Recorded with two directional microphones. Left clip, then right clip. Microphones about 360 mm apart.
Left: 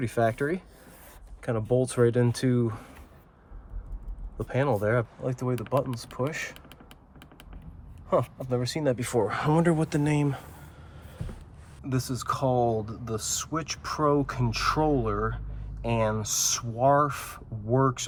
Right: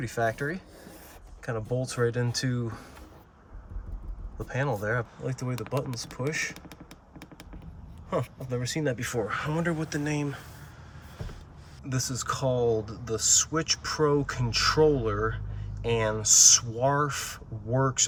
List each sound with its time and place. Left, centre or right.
0.0 s speech: centre
1.4 s a sound: centre
1.8 s speech: centre
4.4 s speech: centre
8.1 s speech: centre
11.9 s speech: centre